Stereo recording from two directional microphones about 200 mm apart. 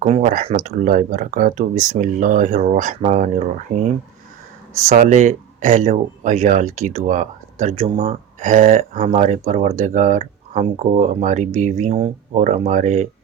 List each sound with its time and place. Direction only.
0.0 s speech: 35° right (ahead or behind)
4.9 s speech: 35° right (ahead or behind)